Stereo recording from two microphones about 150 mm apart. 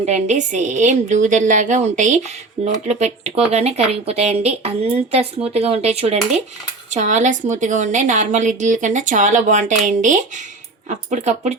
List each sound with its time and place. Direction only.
0.0 s a woman's voice: 50° right (ahead or behind)